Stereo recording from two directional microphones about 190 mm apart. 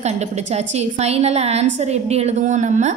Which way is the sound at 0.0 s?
35° right (ahead or behind).